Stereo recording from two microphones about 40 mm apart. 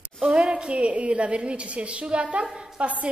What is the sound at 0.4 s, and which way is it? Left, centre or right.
A woman's voice, right.